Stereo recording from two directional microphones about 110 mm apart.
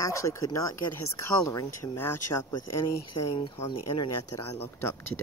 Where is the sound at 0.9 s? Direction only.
40° left (ahead or behind).